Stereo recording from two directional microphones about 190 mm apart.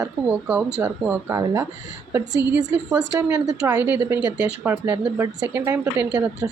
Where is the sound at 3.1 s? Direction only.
10° right (ahead or behind).